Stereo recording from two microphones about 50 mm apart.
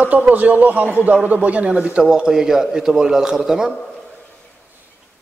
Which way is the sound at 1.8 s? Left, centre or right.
Centre.